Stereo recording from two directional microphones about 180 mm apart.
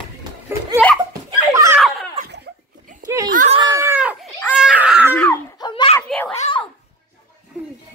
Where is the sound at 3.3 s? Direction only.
45° right (ahead or behind).